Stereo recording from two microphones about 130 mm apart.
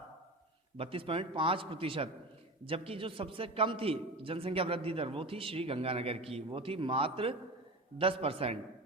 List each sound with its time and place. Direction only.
0.8 s a man's voice: 45° right (ahead or behind)